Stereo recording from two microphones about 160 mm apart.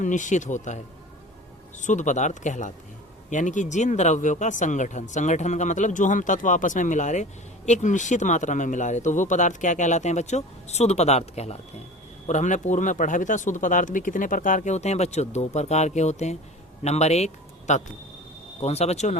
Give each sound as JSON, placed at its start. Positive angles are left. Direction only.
{"t": 0.0, "sound": "speech", "side_deg": 50}
{"t": 1.8, "sound": "a man's voice", "side_deg": 50}